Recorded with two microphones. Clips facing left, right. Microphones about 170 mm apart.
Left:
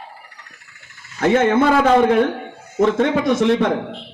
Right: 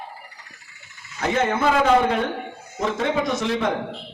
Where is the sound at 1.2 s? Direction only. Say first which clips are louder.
Left 7 dB; 50° left (ahead or behind).